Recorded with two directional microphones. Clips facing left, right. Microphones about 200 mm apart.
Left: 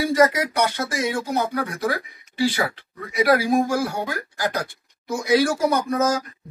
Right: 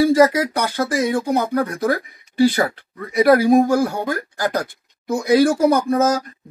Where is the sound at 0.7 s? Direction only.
40° right (ahead or behind).